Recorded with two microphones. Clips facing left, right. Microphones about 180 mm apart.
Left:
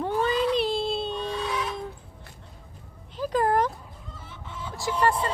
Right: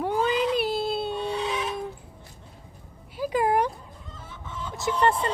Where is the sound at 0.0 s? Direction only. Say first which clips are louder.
Even; 15° right (ahead or behind).